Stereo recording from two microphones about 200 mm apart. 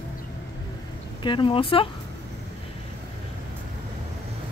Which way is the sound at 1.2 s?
25° left (ahead or behind).